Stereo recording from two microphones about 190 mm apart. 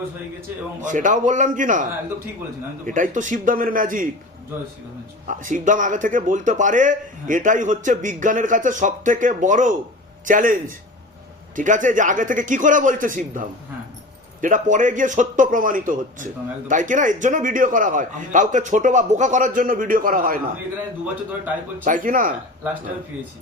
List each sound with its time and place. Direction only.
0.8 s a man's voice: 40° right (ahead or behind)
5.3 s a man's voice: 45° right (ahead or behind)
14.4 s a man's voice: 40° right (ahead or behind)
21.8 s a man's voice: 45° right (ahead or behind)